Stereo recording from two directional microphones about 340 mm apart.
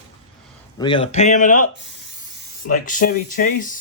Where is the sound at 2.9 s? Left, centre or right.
Left.